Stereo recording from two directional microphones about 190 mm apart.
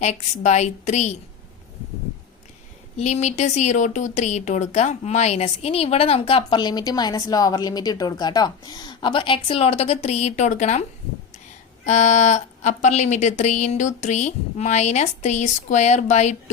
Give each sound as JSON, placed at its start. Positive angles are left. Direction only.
{"t": 0.0, "sound": "speech", "side_deg": 35}
{"t": 3.0, "sound": "speech", "side_deg": 40}
{"t": 11.9, "sound": "speech", "side_deg": 40}